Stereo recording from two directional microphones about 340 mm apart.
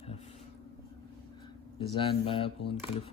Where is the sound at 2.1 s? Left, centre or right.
Centre.